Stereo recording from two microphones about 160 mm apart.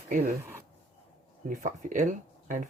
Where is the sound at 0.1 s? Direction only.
65° right (ahead or behind).